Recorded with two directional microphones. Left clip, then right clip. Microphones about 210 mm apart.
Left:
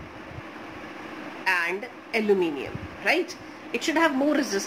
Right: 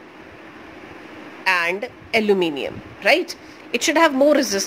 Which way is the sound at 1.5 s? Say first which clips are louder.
Right 6 dB; 50° right (ahead or behind).